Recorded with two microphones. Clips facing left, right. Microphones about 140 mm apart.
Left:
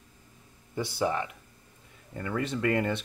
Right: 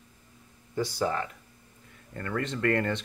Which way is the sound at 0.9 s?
15° left (ahead or behind).